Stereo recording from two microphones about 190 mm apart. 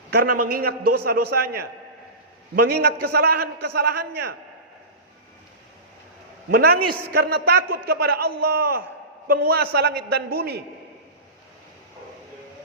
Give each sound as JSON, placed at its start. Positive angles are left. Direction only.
{"t": 0.1, "sound": "a man's voice", "side_deg": -50}
{"t": 6.5, "sound": "a man's voice", "side_deg": -55}